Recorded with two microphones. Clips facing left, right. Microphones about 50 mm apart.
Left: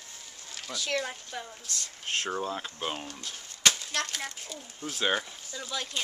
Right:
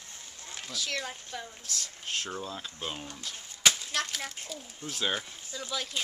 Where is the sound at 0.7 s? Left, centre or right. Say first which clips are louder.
Left 4 dB; centre.